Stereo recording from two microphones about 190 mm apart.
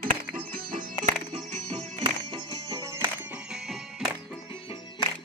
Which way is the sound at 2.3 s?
20° right (ahead or behind).